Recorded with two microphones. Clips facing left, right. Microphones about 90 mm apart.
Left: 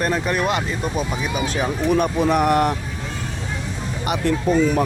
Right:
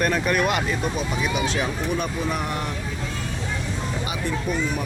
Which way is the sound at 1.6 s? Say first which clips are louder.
Left 6 dB; 50° left (ahead or behind).